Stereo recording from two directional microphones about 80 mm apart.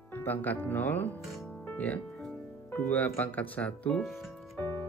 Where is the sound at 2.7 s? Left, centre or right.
Left.